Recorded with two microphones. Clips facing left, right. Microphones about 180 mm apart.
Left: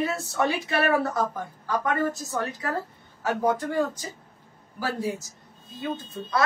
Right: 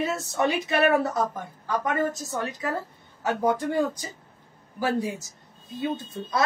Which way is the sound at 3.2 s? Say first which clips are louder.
Right 1 dB; 20° right (ahead or behind).